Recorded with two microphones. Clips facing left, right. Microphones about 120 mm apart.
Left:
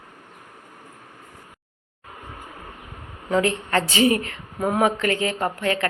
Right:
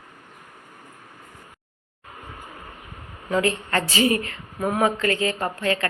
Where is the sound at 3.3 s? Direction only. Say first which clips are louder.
Left 2 dB; 15° left (ahead or behind).